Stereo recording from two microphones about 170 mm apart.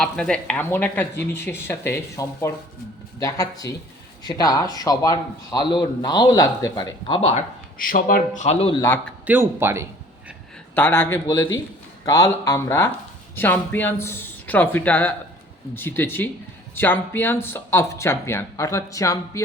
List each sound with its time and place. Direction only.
0.0 s speech: 5° left (ahead or behind); by 7.3 s 30° left (ahead or behind)
7.8 s a man's voice: 55° left (ahead or behind); by 8.7 s 40° left (ahead or behind)
9.2 s speech: 10° right (ahead or behind)
10.8 s speech: 10° left (ahead or behind)